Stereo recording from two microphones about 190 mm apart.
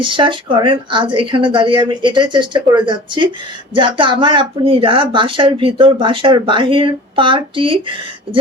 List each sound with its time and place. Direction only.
0.0 s speech: 25° right (ahead or behind)